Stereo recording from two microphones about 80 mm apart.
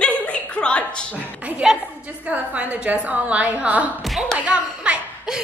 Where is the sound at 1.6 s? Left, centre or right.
Centre.